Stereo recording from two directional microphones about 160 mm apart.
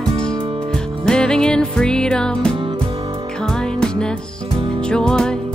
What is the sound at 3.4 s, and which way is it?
Music, 5° left (ahead or behind).